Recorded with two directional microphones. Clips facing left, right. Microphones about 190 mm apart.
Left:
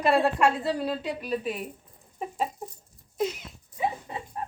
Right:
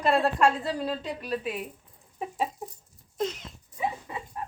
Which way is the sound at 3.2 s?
5° left (ahead or behind).